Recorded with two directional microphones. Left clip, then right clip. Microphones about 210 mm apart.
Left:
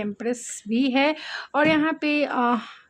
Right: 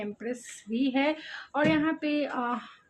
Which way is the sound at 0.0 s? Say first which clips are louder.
Left 7 dB; 50° left (ahead or behind).